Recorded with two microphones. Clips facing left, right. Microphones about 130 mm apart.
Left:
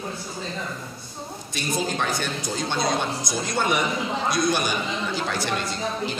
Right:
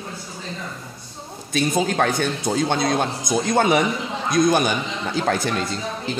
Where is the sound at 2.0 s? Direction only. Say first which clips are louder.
Right 6 dB; 55° right (ahead or behind).